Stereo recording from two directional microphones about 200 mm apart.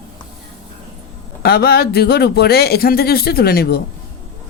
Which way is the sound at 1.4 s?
50° left (ahead or behind).